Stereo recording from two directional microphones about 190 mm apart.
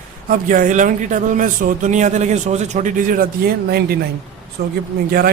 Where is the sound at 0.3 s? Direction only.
45° right (ahead or behind).